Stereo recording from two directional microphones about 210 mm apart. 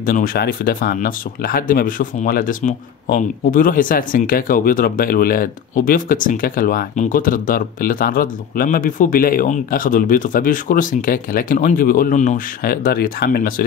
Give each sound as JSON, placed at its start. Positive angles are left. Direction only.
{"t": 0.0, "sound": "speech", "side_deg": 40}